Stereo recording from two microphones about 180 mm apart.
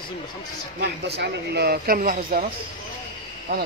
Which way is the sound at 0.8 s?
70° right (ahead or behind).